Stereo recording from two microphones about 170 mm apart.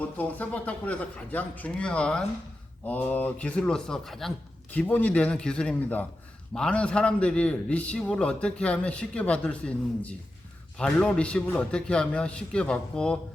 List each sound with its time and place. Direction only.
0.0 s a man's voice: 10° left (ahead or behind)